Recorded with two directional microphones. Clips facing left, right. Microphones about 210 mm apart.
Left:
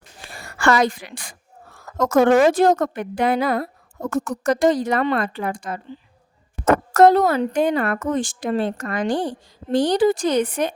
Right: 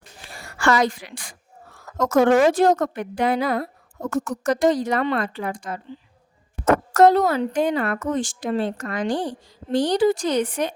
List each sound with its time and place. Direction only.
0.6 s speech: 55° left (ahead or behind)
6.9 s speech: 55° left (ahead or behind)